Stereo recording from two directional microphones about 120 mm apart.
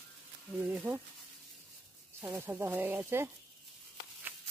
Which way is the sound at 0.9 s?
15° right (ahead or behind).